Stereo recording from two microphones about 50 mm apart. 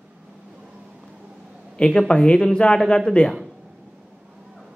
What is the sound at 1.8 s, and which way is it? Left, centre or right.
Speech, left.